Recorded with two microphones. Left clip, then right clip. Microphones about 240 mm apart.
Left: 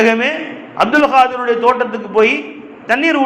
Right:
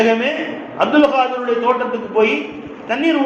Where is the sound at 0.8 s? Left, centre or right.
Left.